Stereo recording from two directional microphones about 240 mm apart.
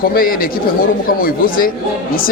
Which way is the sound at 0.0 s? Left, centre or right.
Left.